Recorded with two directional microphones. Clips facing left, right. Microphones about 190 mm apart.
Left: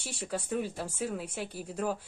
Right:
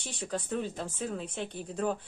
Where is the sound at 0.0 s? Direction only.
10° left (ahead or behind).